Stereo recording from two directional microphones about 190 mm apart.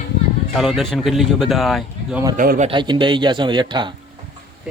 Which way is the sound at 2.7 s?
25° right (ahead or behind).